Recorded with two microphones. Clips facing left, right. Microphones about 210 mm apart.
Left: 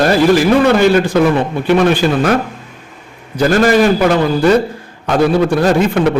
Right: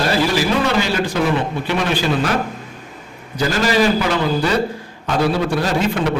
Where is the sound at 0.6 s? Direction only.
55° left (ahead or behind).